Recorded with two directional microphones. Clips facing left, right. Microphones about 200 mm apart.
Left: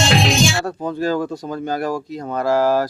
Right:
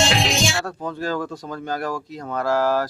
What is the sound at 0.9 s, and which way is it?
Speech, 5° left (ahead or behind).